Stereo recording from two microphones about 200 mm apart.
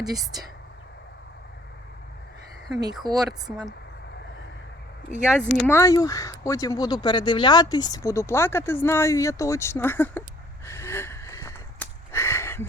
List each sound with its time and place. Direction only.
0.0 s speech: 20° right (ahead or behind)
3.1 s speech: 20° right (ahead or behind)
5.4 s speech: 10° left (ahead or behind)
10.7 s a sound: 10° left (ahead or behind)